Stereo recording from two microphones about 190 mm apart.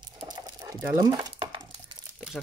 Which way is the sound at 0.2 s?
20° right (ahead or behind).